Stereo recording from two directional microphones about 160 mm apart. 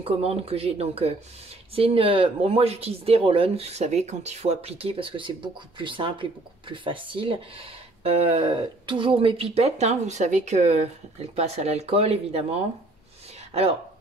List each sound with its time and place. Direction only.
0.0 s speech: 40° right (ahead or behind)